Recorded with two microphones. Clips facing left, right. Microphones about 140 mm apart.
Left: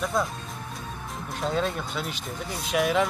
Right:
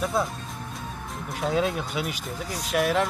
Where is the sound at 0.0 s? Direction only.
Centre (ahead or behind).